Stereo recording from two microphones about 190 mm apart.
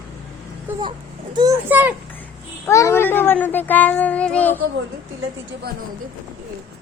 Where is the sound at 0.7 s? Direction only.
10° right (ahead or behind).